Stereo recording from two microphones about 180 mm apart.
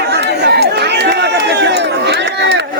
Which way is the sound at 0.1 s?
65° right (ahead or behind).